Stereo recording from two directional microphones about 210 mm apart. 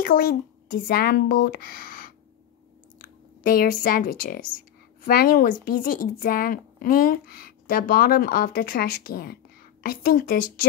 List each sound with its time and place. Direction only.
0.0 s speech: 45° left (ahead or behind)